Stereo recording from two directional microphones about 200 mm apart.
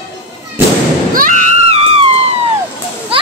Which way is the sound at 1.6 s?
30° right (ahead or behind).